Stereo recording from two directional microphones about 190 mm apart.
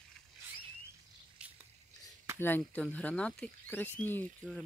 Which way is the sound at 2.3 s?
10° left (ahead or behind).